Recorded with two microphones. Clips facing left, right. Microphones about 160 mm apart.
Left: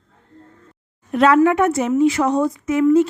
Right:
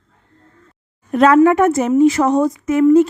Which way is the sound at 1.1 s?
45° right (ahead or behind).